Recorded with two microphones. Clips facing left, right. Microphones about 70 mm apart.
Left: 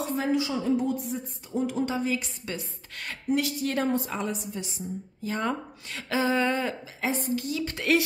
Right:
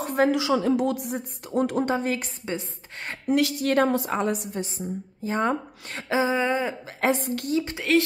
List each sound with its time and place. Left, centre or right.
0.0 s speech: right
2.4 s a woman's voice: right
3.3 s a woman's voice: right
4.6 s a woman's voice: right
5.2 s a woman's voice: right
6.0 s a sound: right
7.0 s speech: right
7.9 s music: centre